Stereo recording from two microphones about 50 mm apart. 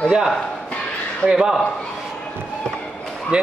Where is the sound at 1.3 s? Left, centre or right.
Centre.